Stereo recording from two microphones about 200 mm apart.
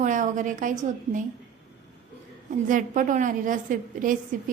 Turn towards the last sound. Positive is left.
turn(degrees=-40)  # may be behind; listen again after turning